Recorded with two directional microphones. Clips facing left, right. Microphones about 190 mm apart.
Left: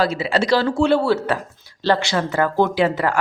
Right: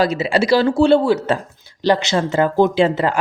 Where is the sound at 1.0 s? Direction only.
15° right (ahead or behind).